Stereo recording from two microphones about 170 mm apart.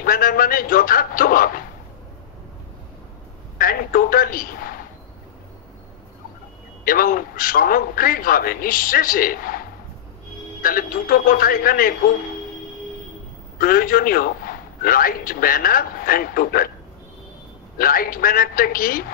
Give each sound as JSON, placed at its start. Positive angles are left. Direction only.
{"t": 0.0, "sound": "a man's voice", "side_deg": 55}
{"t": 3.5, "sound": "a man's voice", "side_deg": 60}
{"t": 6.8, "sound": "a man's voice", "side_deg": 55}
{"t": 10.6, "sound": "a man's voice", "side_deg": 55}
{"t": 13.6, "sound": "a man's voice", "side_deg": 55}
{"t": 17.7, "sound": "a man's voice", "side_deg": 60}